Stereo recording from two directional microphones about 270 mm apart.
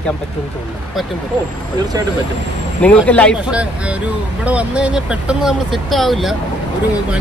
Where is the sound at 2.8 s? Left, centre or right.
Centre.